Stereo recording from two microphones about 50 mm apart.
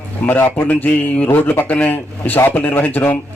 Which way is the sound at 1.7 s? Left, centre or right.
Left.